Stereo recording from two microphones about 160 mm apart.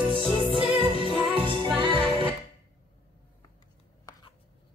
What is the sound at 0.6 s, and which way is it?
Music, 35° left (ahead or behind).